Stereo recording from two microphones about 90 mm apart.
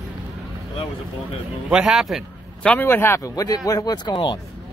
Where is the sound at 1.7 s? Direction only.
5° right (ahead or behind).